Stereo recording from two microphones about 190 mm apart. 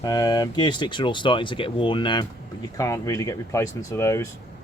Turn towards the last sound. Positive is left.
turn(degrees=15)  # may be behind; listen again after turning